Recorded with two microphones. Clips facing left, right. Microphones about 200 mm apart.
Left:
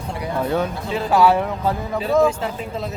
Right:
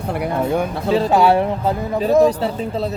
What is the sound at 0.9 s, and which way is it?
Speech, 35° right (ahead or behind).